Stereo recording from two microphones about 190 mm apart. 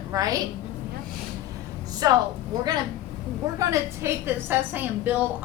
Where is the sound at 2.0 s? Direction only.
20° right (ahead or behind).